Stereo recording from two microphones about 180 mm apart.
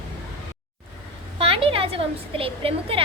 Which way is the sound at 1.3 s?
30° right (ahead or behind).